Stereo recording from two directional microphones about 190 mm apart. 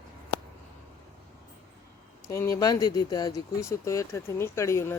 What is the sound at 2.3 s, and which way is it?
Speech, 15° left (ahead or behind).